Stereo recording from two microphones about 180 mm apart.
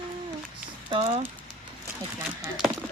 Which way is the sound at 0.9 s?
30° right (ahead or behind).